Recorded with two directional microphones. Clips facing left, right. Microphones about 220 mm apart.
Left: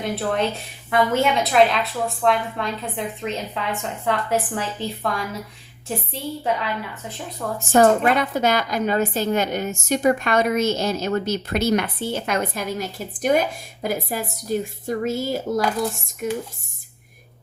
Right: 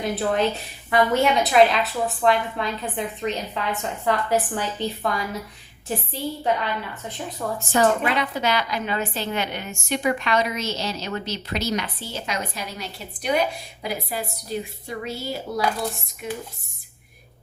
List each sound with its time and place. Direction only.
0.0 s a woman's voice: centre (ahead or behind)
7.7 s speech: 45° left (ahead or behind)